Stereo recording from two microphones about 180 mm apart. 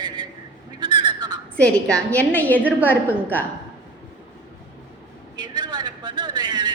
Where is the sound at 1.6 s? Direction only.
5° left (ahead or behind).